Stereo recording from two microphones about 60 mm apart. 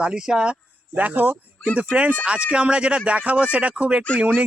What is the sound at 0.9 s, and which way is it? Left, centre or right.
Speech, right.